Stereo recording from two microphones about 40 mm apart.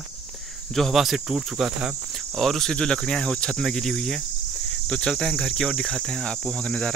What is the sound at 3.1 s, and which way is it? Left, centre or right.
Cricket, centre.